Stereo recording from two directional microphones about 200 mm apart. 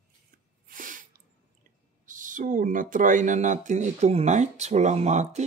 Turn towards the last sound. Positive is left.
turn(degrees=-35)  # may be behind; listen again after turning